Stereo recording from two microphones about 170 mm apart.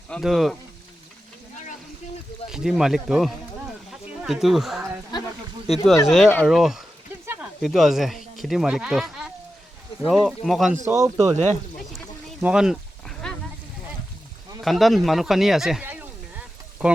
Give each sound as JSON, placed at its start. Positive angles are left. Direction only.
{"t": 0.1, "sound": "speech", "side_deg": 0}
{"t": 2.5, "sound": "speech", "side_deg": -5}
{"t": 3.9, "sound": "a sound", "side_deg": -5}
{"t": 5.6, "sound": "speech", "side_deg": 0}
{"t": 10.8, "sound": "speech", "side_deg": -15}
{"t": 11.9, "sound": "a sound", "side_deg": -5}
{"t": 14.6, "sound": "speech", "side_deg": 0}